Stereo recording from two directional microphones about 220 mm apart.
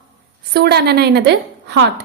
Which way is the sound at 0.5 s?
45° right (ahead or behind).